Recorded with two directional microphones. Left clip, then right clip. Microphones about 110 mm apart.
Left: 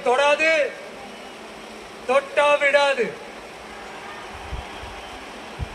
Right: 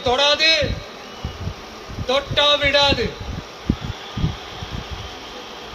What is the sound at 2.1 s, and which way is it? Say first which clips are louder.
Speech: right 1 dB; 25° right (ahead or behind).